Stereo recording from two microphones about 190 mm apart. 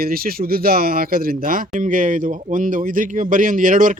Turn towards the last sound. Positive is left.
turn(degrees=-45)  # may be behind; listen again after turning